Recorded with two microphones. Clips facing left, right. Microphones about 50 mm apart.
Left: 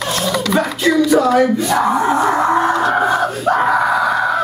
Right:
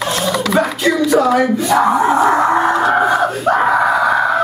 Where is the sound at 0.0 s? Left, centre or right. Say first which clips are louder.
Right 1 dB; centre.